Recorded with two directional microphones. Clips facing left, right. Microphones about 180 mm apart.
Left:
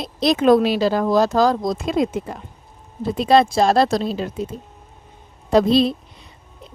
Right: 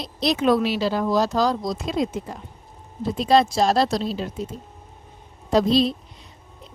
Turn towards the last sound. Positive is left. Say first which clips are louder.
# left 3 dB
turn(degrees=55)  # may be behind; listen again after turning